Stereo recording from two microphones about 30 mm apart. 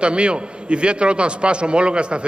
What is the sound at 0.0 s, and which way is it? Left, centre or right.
A man's voice, right.